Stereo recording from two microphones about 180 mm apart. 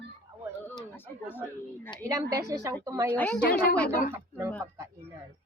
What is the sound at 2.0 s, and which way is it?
A woman's voice, 20° right (ahead or behind).